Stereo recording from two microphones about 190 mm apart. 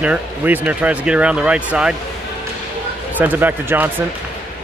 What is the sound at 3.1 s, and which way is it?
Speech, 10° right (ahead or behind).